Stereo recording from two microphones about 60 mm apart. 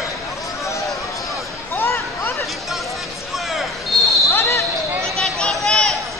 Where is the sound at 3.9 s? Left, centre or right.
Centre.